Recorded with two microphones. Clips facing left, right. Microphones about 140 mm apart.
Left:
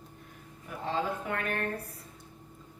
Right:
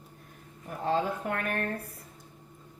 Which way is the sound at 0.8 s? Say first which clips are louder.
Right 4 dB; 45° right (ahead or behind).